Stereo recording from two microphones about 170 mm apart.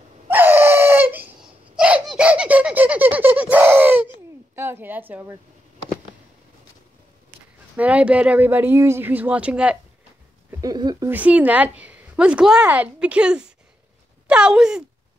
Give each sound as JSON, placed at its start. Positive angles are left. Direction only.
{"t": 0.3, "sound": "dog", "side_deg": -10}
{"t": 4.6, "sound": "a woman's voice", "side_deg": -15}
{"t": 7.7, "sound": "a woman's voice", "side_deg": -10}
{"t": 10.6, "sound": "speech", "side_deg": -25}
{"t": 11.1, "sound": "a woman's voice", "side_deg": -10}